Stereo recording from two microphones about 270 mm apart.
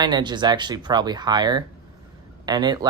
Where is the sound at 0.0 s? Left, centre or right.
Centre.